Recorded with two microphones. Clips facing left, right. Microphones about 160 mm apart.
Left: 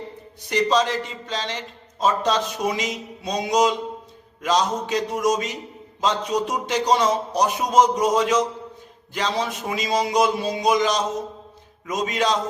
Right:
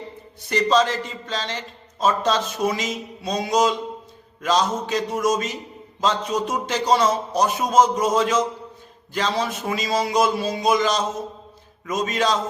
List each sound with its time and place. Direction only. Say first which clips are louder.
0.5 s a man's voice: right 1 dB; 15° left (ahead or behind)